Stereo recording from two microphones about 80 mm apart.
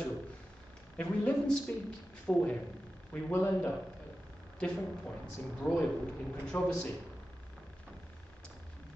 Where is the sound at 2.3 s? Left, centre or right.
Left.